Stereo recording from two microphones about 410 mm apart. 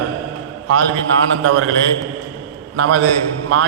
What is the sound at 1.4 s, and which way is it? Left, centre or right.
Speech, right.